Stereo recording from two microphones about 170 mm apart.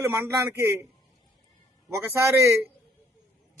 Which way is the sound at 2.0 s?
15° right (ahead or behind).